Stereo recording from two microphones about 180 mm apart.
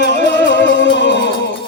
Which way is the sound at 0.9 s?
70° left (ahead or behind).